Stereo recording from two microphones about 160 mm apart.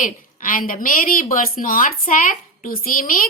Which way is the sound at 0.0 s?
60° left (ahead or behind).